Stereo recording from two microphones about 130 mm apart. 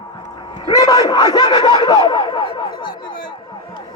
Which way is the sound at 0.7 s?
30° left (ahead or behind).